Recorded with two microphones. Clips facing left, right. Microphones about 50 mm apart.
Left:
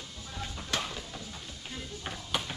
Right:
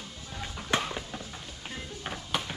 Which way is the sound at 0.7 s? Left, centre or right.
Right.